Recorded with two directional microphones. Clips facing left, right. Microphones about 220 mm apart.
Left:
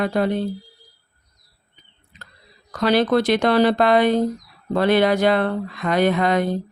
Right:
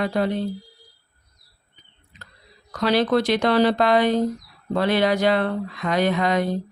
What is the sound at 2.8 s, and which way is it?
Speech, 50° left (ahead or behind).